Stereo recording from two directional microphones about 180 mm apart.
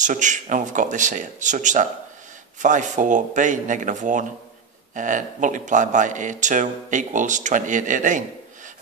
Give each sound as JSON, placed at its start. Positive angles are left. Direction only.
{"t": 0.0, "sound": "a man's voice", "side_deg": -45}